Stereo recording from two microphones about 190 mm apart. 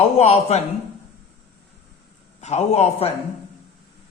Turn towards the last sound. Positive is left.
turn(degrees=35)  # may be behind; listen again after turning